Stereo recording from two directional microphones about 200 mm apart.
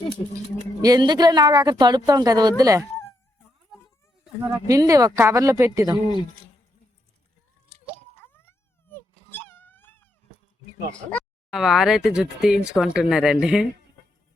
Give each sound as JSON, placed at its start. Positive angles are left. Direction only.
{"t": 0.8, "sound": "speech", "side_deg": -20}
{"t": 4.4, "sound": "speech", "side_deg": -15}
{"t": 8.3, "sound": "wail", "side_deg": 10}
{"t": 10.9, "sound": "speech", "side_deg": 0}